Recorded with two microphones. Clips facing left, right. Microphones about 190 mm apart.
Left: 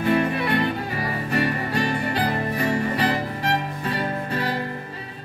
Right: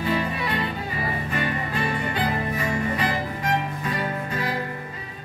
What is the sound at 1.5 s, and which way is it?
Music, 40° left (ahead or behind).